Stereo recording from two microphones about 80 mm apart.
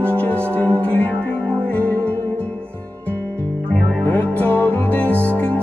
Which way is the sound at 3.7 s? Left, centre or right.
Centre.